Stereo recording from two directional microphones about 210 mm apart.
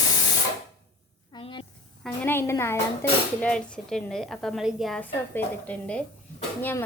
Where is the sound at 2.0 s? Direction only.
10° left (ahead or behind).